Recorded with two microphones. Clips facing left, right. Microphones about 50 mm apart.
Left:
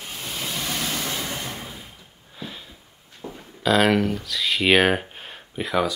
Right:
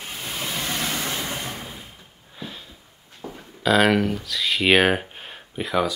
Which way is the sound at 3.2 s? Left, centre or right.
Centre.